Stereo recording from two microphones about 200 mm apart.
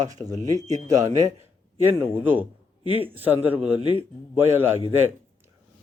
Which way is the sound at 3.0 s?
10° right (ahead or behind).